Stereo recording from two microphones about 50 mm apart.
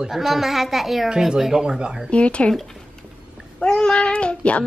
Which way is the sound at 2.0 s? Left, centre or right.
Left.